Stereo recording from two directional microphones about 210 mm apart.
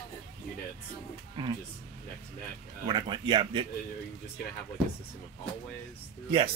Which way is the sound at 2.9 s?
20° right (ahead or behind).